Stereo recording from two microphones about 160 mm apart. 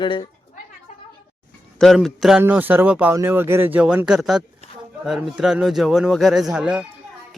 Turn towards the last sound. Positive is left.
turn(degrees=-5)  # may be behind; listen again after turning